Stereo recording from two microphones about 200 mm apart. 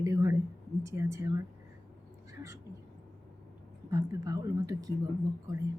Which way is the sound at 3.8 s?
15° right (ahead or behind).